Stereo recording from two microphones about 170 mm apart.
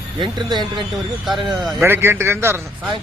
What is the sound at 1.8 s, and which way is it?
Speech, 15° right (ahead or behind).